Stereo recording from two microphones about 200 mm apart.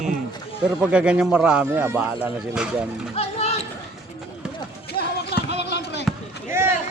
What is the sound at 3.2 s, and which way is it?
Speech, 30° left (ahead or behind).